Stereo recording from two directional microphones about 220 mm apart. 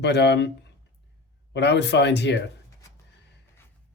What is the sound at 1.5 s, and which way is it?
Speech, 50° left (ahead or behind).